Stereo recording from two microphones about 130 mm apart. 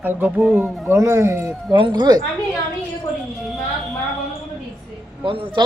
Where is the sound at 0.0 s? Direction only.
15° right (ahead or behind).